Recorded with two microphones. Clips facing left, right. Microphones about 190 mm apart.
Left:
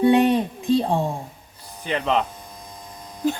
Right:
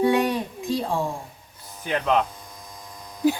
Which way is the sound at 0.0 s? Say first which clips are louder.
Left 4 dB; 25° left (ahead or behind).